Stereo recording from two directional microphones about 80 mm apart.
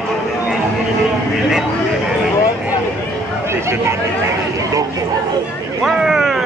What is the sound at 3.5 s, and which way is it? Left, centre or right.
Speech, right.